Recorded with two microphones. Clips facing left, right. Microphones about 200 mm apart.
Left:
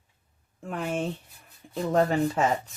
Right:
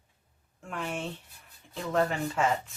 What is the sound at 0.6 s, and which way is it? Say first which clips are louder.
Speech: left 5 dB; 40° left (ahead or behind).